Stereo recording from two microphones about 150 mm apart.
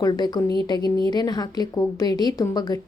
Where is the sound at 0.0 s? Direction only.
30° left (ahead or behind).